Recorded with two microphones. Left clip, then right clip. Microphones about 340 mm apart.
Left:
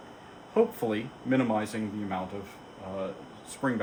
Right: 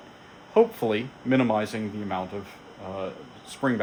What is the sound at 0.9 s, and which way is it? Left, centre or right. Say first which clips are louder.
Speech: right 4 dB; right.